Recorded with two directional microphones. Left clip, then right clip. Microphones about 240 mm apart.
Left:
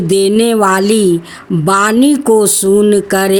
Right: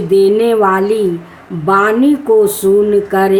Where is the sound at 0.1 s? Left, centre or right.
Left.